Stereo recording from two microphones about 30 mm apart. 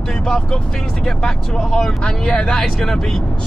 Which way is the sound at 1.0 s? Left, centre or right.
Left.